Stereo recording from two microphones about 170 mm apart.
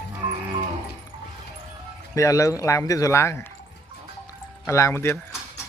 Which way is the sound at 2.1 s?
20° left (ahead or behind).